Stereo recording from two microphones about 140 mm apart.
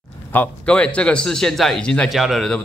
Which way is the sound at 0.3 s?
10° left (ahead or behind).